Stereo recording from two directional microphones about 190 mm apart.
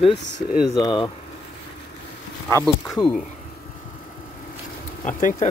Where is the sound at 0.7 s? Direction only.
25° left (ahead or behind).